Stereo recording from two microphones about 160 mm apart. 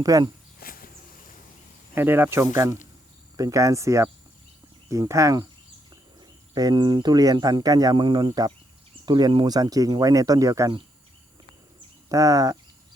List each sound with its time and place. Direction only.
0.0 s speech: 20° right (ahead or behind)
0.6 s a sound: 65° left (ahead or behind)
2.0 s speech: 15° right (ahead or behind)
12.0 s speech: 20° right (ahead or behind)